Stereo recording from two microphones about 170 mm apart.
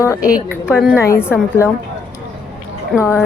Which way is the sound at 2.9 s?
Centre (ahead or behind).